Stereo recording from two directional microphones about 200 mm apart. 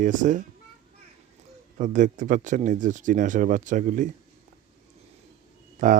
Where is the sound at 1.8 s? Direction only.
40° right (ahead or behind).